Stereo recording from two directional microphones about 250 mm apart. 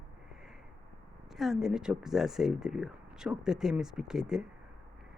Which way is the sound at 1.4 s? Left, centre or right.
Centre.